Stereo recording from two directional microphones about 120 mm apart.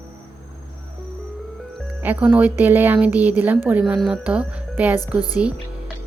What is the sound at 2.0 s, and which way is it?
A woman's voice, 15° right (ahead or behind).